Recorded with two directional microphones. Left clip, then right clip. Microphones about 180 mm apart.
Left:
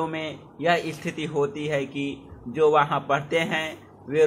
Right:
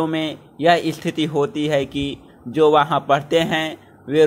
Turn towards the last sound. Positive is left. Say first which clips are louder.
# right 5 dB
turn(degrees=-35)  # may be behind; listen again after turning